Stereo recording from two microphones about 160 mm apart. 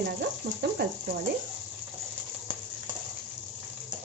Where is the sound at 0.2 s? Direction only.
90° right.